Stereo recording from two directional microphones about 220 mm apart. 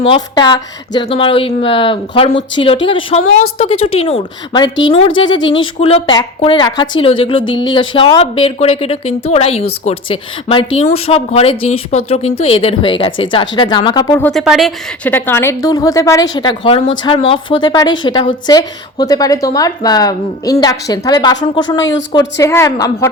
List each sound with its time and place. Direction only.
0.0 s a woman's voice: 20° left (ahead or behind); by 15.1 s centre (ahead or behind)
15.1 s a woman's voice: 10° left (ahead or behind)